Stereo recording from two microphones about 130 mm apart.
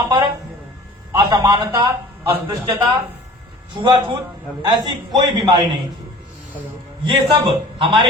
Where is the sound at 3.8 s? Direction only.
40° right (ahead or behind).